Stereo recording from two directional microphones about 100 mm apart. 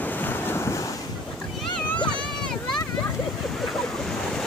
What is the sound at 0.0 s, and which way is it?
Waves, 20° left (ahead or behind).